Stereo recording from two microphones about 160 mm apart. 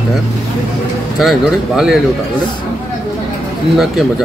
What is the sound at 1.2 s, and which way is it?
Speech, centre (ahead or behind).